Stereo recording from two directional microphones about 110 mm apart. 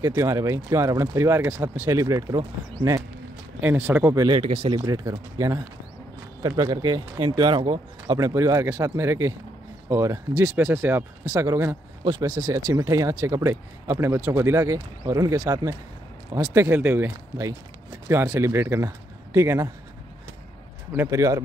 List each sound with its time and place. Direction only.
0.0 s speech: 25° right (ahead or behind)
3.6 s speech: 15° right (ahead or behind)
4.1 s speech: 30° right (ahead or behind)
4.4 s speech: 60° right (ahead or behind)
4.8 s speech: 35° right (ahead or behind)
8.2 s speech: 30° right (ahead or behind)
11.2 s speech: 30° right (ahead or behind)
12.0 s speech: 40° right (ahead or behind)
16.5 s speech: 20° right (ahead or behind)
20.9 s speech: 20° right (ahead or behind)